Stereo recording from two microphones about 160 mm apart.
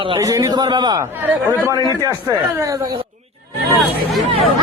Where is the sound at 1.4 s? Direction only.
15° right (ahead or behind).